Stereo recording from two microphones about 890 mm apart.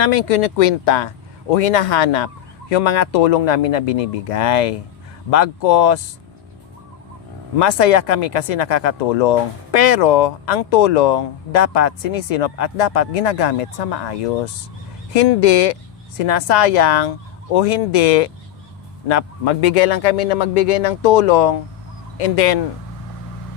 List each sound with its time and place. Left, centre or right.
0.0 s a man's voice: left
7.6 s a man's voice: left